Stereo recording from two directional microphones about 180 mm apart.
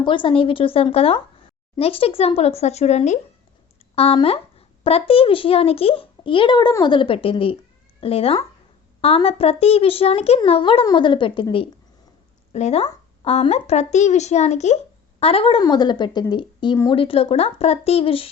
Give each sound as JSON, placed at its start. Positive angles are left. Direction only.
{"t": 0.0, "sound": "a woman's voice", "side_deg": 25}